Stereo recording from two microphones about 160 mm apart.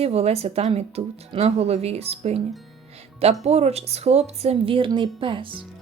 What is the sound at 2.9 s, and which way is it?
Music, 40° right (ahead or behind).